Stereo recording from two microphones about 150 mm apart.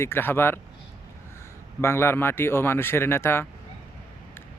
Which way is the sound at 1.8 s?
15° left (ahead or behind).